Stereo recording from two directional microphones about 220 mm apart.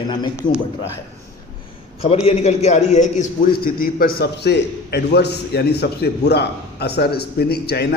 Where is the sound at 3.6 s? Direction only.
40° left (ahead or behind).